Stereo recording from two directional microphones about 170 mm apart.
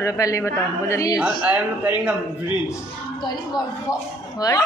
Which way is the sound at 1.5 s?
10° right (ahead or behind).